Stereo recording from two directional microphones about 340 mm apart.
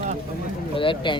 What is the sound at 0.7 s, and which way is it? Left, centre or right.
Speech, centre.